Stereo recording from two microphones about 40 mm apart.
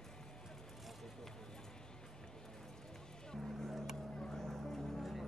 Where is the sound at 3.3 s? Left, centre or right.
Centre.